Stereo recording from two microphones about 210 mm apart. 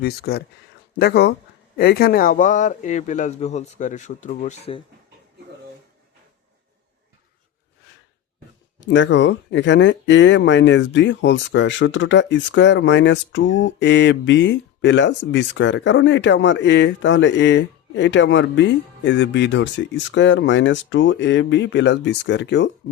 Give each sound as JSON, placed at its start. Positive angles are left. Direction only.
{"t": 0.0, "sound": "speech", "side_deg": 50}
{"t": 8.9, "sound": "speech", "side_deg": 60}